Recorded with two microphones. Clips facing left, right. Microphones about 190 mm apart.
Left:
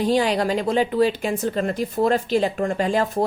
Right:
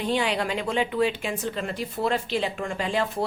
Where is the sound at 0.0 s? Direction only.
40° left (ahead or behind).